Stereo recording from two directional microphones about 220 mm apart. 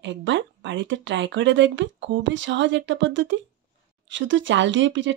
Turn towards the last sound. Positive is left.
turn(degrees=-55)  # may be behind; listen again after turning